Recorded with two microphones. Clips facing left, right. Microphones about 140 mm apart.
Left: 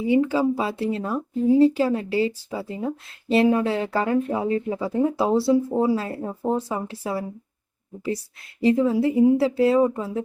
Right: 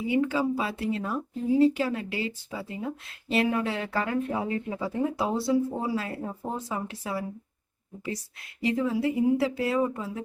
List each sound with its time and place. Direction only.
0.1 s speech: 30° left (ahead or behind)
8.6 s speech: 30° left (ahead or behind)